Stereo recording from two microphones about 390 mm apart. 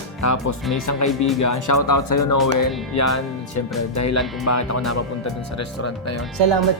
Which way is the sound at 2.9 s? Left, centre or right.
Left.